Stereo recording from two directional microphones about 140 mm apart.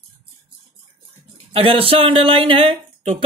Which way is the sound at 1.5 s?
40° right (ahead or behind).